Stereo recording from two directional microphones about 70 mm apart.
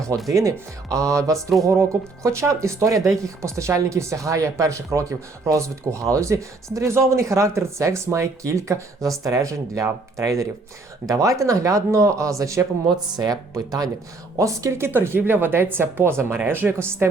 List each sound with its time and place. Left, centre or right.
0.3 s speech: right
13.1 s a woman's voice: right